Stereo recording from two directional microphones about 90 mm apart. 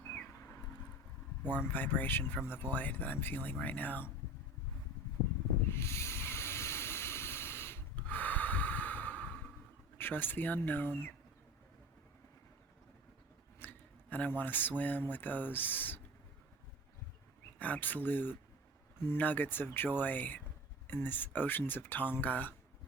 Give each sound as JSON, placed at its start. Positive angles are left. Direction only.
{"t": 0.3, "sound": "a sound", "side_deg": 30}
{"t": 1.5, "sound": "speech", "side_deg": 20}
{"t": 5.6, "sound": "hiss", "side_deg": 30}
{"t": 10.0, "sound": "speech", "side_deg": 20}
{"t": 13.6, "sound": "speech", "side_deg": 20}
{"t": 17.6, "sound": "speech", "side_deg": 20}